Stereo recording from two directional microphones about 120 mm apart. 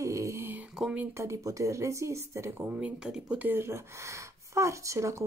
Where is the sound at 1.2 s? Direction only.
25° right (ahead or behind).